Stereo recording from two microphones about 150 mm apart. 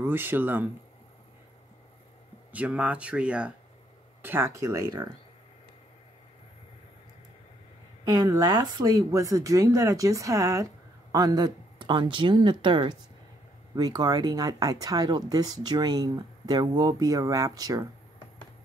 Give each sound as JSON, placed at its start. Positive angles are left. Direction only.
{"t": 0.0, "sound": "speech", "side_deg": -15}
{"t": 2.5, "sound": "speech", "side_deg": -10}
{"t": 8.0, "sound": "speech", "side_deg": -25}